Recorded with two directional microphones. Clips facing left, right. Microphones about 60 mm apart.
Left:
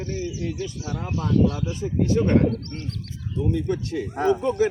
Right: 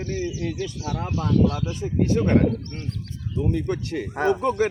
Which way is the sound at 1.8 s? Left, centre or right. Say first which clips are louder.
Even; centre.